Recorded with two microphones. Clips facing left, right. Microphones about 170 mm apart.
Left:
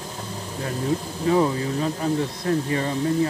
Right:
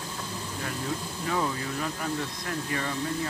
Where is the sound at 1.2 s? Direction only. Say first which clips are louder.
Left 9 dB; 25° left (ahead or behind).